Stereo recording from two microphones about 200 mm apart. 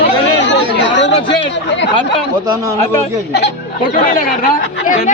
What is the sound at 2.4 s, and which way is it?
Speech, 20° right (ahead or behind).